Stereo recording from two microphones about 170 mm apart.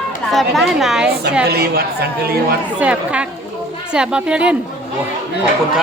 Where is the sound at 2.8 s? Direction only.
5° right (ahead or behind).